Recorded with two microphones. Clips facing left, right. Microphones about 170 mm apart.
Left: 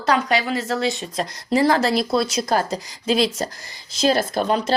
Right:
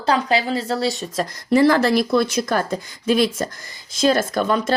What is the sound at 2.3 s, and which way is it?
A woman's voice, 55° right (ahead or behind).